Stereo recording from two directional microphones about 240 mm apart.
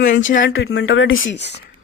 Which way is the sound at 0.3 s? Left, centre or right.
Left.